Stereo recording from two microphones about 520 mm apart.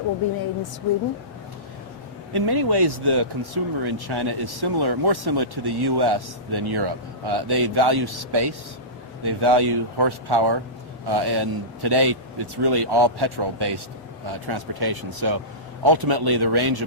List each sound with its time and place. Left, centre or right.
2.3 s speech: right